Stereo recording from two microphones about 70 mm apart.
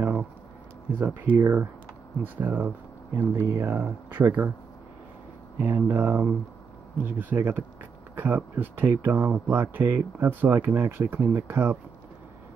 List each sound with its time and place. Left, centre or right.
0.0 s a sound: centre
0.9 s speech: right
1.3 s speech: right
2.2 s speech: right
3.4 s speech: right
3.8 s speech: right
5.6 s speech: right